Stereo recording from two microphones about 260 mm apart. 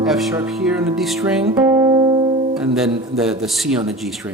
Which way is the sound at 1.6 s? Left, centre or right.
Centre.